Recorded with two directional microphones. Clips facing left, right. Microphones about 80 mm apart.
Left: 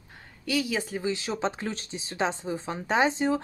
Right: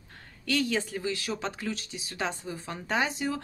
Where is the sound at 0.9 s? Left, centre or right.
Left.